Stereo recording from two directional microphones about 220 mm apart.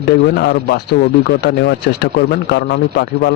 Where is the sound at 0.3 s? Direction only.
50° left (ahead or behind).